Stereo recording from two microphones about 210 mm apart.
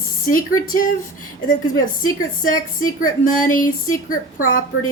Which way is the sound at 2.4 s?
40° left (ahead or behind).